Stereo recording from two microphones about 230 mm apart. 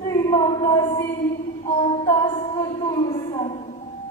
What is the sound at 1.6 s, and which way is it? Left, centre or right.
Music, left.